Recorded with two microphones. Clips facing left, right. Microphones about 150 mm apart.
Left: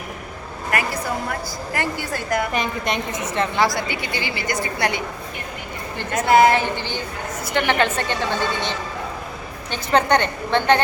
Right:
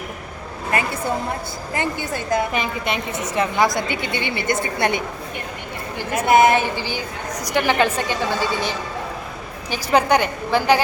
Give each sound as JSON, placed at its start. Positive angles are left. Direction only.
{"t": 0.7, "sound": "a woman's voice", "side_deg": -25}
{"t": 2.5, "sound": "a woman's voice", "side_deg": -5}
{"t": 3.6, "sound": "a woman's voice", "side_deg": -20}
{"t": 6.1, "sound": "a woman's voice", "side_deg": -20}
{"t": 6.7, "sound": "a woman's voice", "side_deg": -10}